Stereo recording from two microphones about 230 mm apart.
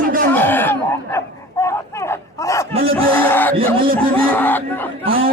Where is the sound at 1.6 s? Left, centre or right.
Centre.